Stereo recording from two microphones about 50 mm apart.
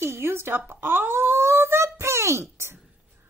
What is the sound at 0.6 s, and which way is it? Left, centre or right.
Wail, right.